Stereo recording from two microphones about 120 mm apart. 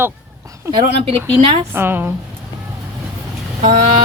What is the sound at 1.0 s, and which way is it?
Speech, 55° right (ahead or behind).